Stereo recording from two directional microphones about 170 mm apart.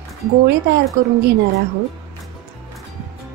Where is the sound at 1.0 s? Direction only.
90° right.